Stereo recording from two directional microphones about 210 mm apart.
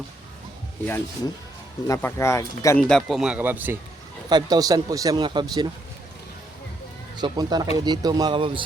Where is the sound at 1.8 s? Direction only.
15° left (ahead or behind); by 5.7 s 20° right (ahead or behind).